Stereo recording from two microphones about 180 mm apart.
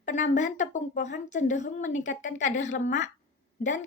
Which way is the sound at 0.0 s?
45° left (ahead or behind).